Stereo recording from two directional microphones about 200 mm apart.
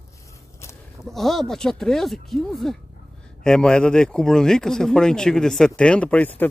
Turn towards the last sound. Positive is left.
turn(degrees=10)  # may be behind; listen again after turning